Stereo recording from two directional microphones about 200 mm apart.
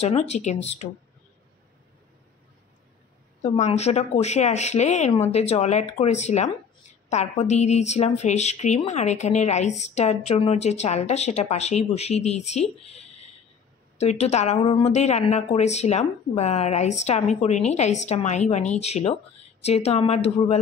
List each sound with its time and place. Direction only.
0.0 s speech: 35° left (ahead or behind)
3.4 s speech: 35° left (ahead or behind)
12.8 s a sound: 30° left (ahead or behind)
13.9 s speech: 35° left (ahead or behind)